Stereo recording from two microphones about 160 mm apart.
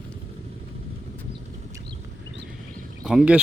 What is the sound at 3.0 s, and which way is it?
Speech, 5° right (ahead or behind).